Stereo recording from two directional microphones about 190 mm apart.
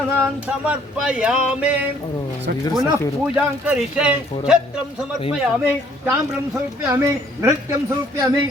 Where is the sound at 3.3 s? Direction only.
5° right (ahead or behind).